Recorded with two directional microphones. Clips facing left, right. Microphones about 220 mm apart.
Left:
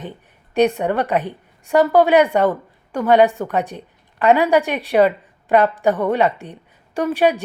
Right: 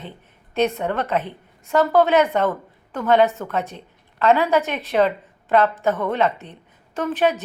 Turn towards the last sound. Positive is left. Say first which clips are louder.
# left 3 dB
turn(degrees=10)  # may be behind; listen again after turning